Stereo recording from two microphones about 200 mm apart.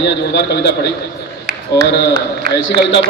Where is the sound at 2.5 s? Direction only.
60° left (ahead or behind).